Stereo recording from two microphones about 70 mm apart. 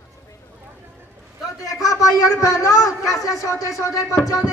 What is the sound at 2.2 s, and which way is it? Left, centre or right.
Speech, left.